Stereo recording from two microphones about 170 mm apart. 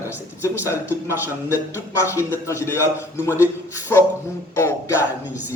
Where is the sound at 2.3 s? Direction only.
15° left (ahead or behind).